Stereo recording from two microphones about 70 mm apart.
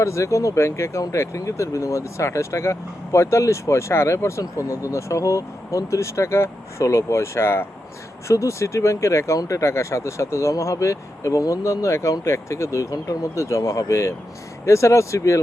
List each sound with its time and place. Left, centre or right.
0.0 s speech: left